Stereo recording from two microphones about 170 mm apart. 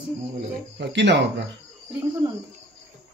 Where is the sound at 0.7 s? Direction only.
90° right.